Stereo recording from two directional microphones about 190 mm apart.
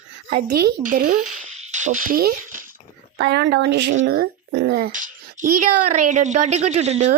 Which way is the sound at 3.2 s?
65° right (ahead or behind).